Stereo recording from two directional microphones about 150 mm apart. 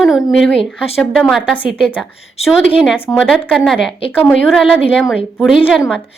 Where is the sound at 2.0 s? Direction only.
Centre (ahead or behind).